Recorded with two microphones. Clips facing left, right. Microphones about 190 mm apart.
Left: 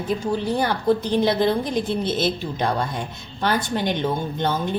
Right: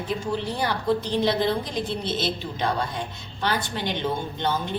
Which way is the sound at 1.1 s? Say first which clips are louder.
Left 4 dB; 55° left (ahead or behind).